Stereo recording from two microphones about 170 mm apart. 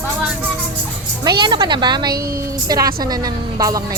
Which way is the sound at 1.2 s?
25° right (ahead or behind).